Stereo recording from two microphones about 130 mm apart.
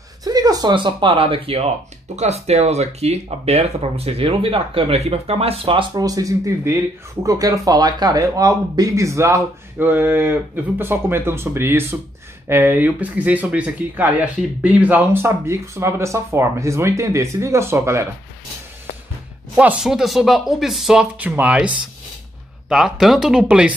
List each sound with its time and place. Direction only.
0.2 s speech: 30° right (ahead or behind); by 1.7 s 45° right (ahead or behind)
2.1 s speech: 55° right (ahead or behind)
5.9 s speech: 30° right (ahead or behind)
19.5 s speech: 10° right (ahead or behind)